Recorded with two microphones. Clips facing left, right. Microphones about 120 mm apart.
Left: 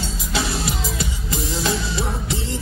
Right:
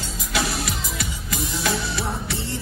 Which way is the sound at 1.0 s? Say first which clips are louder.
Left 3 dB; 25° left (ahead or behind).